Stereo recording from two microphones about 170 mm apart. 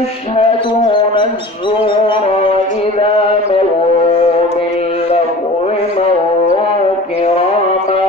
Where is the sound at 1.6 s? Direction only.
30° left (ahead or behind).